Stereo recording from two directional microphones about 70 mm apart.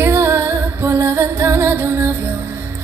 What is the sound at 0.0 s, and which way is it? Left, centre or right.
Music, right.